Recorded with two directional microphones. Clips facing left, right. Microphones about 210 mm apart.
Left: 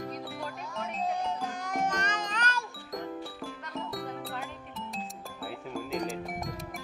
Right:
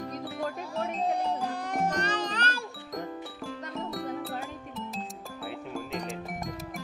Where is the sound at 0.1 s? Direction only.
Centre (ahead or behind).